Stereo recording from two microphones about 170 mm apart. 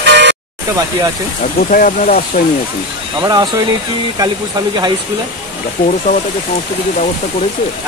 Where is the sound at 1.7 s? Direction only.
55° left (ahead or behind).